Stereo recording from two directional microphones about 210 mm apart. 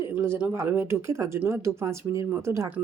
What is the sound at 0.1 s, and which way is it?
A woman's voice, 10° right (ahead or behind).